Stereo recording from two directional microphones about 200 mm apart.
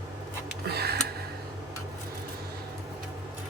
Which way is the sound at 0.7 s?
55° right (ahead or behind).